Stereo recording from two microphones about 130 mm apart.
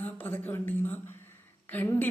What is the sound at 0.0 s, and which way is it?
Speech, 15° left (ahead or behind).